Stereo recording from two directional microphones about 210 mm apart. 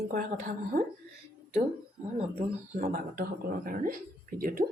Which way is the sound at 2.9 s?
45° right (ahead or behind).